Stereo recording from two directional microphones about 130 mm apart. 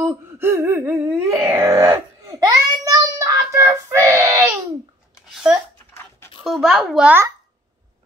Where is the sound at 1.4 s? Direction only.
25° right (ahead or behind).